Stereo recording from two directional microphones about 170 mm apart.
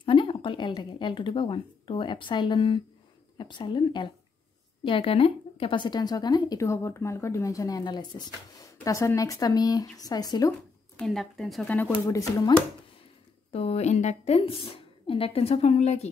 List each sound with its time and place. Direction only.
0.0 s a woman's voice: 30° left (ahead or behind)
11.0 s speech: centre (ahead or behind)
11.9 s speech: 20° left (ahead or behind)
13.5 s a woman's voice: 35° left (ahead or behind)